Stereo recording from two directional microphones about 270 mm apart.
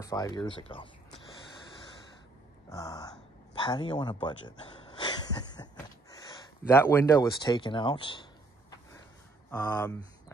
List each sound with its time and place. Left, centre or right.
0.0 s speech: centre
2.7 s speech: centre
6.7 s speech: centre